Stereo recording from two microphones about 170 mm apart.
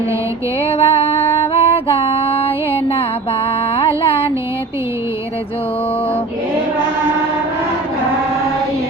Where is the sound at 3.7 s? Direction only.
35° left (ahead or behind).